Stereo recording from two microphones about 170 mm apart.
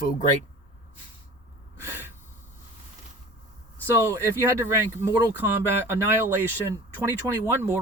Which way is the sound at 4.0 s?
20° right (ahead or behind).